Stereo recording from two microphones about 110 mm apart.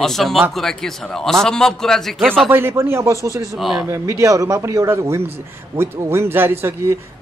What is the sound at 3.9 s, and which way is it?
A man's voice, 30° right (ahead or behind).